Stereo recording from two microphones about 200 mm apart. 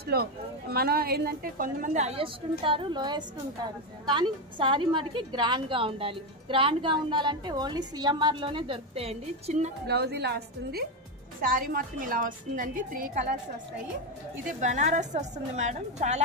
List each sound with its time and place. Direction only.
0.0 s a woman's voice: 50° right (ahead or behind); by 9.7 s 35° right (ahead or behind)
9.8 s a woman's voice: 55° right (ahead or behind)
14.6 s speech: 35° right (ahead or behind)